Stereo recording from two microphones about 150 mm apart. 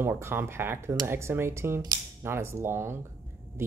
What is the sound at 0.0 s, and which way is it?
Speech, 15° right (ahead or behind).